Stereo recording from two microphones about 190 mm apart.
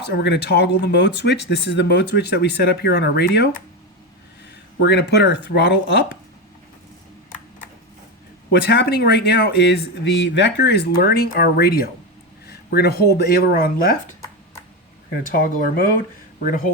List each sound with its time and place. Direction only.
0.1 s speech: 60° left (ahead or behind)
4.8 s speech: 60° left (ahead or behind)
8.6 s speech: 60° left (ahead or behind)
15.2 s speech: 45° left (ahead or behind)